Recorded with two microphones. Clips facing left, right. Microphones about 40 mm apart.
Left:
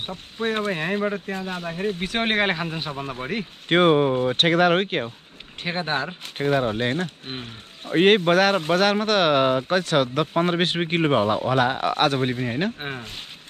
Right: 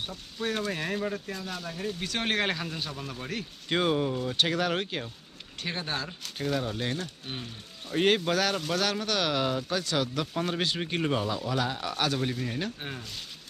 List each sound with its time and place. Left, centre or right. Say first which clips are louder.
0.0 s speech: left 6 dB; left
5.6 s speech: left 8 dB; left